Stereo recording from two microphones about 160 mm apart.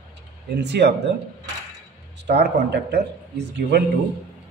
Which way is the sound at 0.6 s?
90° right.